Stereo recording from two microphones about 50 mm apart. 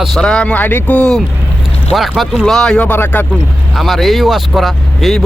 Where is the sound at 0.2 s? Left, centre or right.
Centre.